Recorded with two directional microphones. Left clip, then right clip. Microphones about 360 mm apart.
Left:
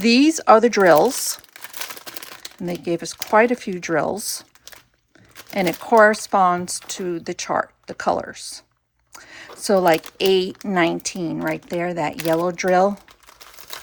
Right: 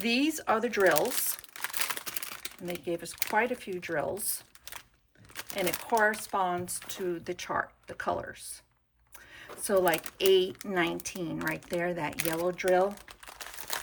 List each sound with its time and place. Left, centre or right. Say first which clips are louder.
0.0 s speech: left 13 dB; centre
2.1 s typewriter: left 4 dB; centre
2.7 s speech: left 10 dB; centre
6.3 s speech: left 13 dB; centre